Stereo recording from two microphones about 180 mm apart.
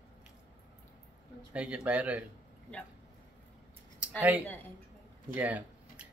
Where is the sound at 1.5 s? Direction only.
5° right (ahead or behind).